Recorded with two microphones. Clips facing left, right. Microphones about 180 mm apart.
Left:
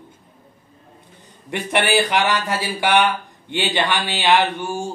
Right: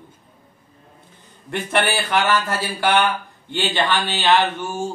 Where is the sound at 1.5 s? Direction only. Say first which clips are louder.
Left 2 dB; 15° left (ahead or behind).